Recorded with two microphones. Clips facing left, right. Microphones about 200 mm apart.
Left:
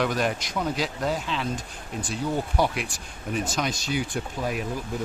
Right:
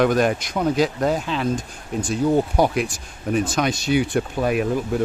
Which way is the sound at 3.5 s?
60° right (ahead or behind).